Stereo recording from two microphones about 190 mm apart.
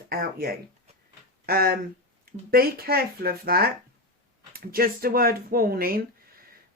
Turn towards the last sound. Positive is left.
turn(degrees=-50)  # may be behind; listen again after turning